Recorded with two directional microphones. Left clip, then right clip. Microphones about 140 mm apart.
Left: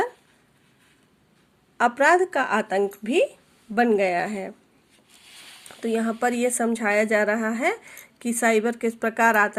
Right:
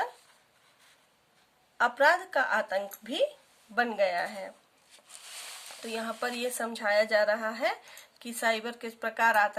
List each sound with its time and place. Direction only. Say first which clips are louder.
1.8 s speech: left 6 dB; 40° left (ahead or behind)
5.9 s speech: left 9 dB; 40° left (ahead or behind)